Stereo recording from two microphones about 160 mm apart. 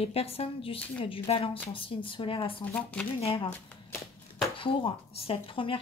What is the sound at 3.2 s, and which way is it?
Speech, 35° left (ahead or behind).